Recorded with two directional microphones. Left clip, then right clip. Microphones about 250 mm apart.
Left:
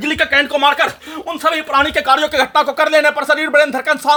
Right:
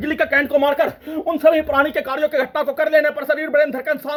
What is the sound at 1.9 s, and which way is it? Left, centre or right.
Speech, centre.